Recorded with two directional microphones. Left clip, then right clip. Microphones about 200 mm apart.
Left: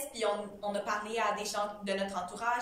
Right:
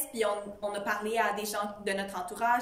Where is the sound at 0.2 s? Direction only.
40° right (ahead or behind).